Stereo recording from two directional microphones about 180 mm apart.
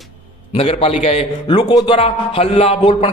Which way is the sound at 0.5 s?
30° left (ahead or behind).